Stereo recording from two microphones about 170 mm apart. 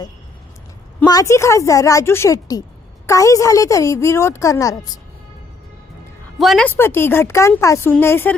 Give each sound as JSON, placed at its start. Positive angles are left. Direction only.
{"t": 1.0, "sound": "a woman's voice", "side_deg": 20}
{"t": 6.4, "sound": "a woman's voice", "side_deg": 0}
{"t": 6.7, "sound": "speech", "side_deg": 15}